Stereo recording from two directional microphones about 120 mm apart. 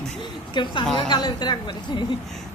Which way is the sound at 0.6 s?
40° left (ahead or behind).